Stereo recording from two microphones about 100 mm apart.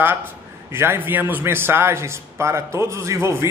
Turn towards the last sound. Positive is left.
turn(degrees=-25)  # may be behind; listen again after turning